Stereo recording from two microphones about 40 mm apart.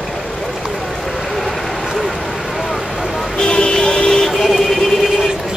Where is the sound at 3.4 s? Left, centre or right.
Centre.